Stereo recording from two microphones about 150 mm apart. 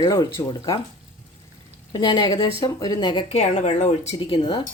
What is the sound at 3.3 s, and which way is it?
Speech, 50° left (ahead or behind).